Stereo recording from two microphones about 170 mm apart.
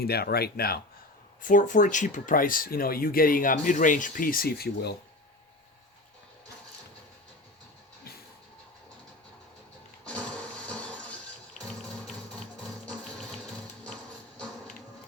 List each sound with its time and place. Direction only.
0.0 s speech: 65° left (ahead or behind)
1.4 s speech: 50° left (ahead or behind); by 4.9 s 70° left (ahead or behind)
10.7 s a sound: 5° left (ahead or behind)